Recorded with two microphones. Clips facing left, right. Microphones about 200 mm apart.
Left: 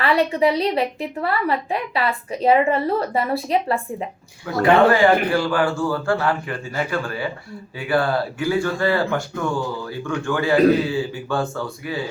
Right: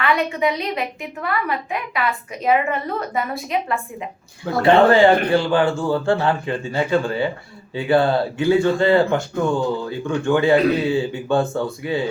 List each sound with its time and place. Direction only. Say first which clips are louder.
0.0 s a woman's voice: left 2 dB; 35° left (ahead or behind)
4.6 s speech: right 2 dB; 25° right (ahead or behind)